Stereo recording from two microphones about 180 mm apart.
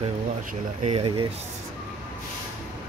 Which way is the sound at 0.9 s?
30° right (ahead or behind).